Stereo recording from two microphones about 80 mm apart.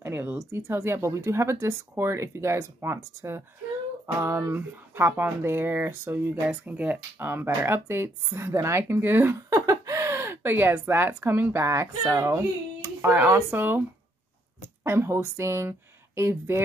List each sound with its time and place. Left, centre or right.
0.0 s speech: right
6.5 s speech: centre; by 13.1 s right
13.1 s speech: right